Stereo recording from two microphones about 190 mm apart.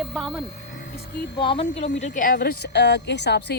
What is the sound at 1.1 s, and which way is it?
Speech, 60° left (ahead or behind).